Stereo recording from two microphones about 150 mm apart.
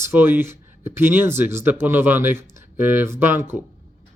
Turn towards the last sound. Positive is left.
turn(degrees=-15)  # may be behind; listen again after turning